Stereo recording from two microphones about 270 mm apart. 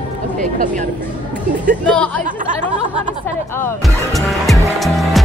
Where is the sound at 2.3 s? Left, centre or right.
Right.